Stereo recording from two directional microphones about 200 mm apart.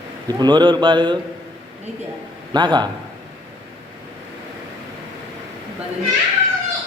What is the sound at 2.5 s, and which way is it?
Speech, 20° right (ahead or behind).